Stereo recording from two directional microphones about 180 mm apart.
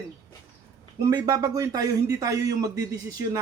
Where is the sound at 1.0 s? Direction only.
20° right (ahead or behind).